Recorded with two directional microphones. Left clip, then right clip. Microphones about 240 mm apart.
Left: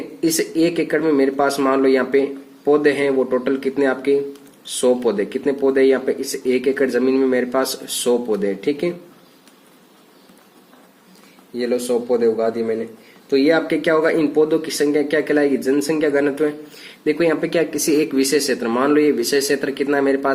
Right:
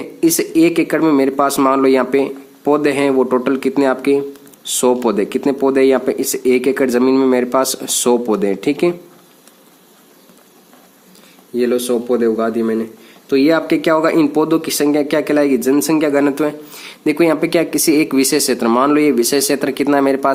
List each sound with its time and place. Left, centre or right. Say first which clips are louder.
0.2 s speech: right 5 dB; right
11.5 s speech: right 4 dB; right